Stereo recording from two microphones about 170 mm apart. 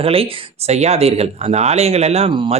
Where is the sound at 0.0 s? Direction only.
35° right (ahead or behind).